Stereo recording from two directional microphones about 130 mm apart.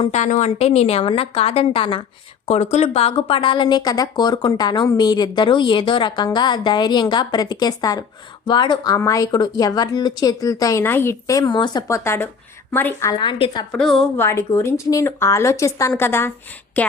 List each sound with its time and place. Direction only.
0.1 s a woman's voice: 65° left (ahead or behind); by 2.0 s 40° left (ahead or behind)
2.5 s speech: 55° left (ahead or behind); by 11.9 s 35° left (ahead or behind)
11.9 s a woman's voice: 20° left (ahead or behind)
13.1 s speech: 35° left (ahead or behind)
13.7 s a woman's voice: centre (ahead or behind)
14.2 s a woman's voice: 20° left (ahead or behind)